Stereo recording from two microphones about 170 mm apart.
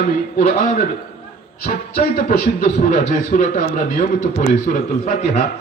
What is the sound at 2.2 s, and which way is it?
A man's voice, 50° left (ahead or behind).